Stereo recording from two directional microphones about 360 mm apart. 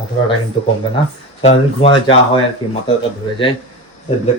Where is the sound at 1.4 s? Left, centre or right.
Centre.